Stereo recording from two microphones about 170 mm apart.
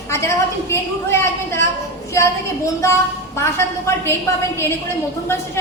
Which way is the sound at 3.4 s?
15° left (ahead or behind).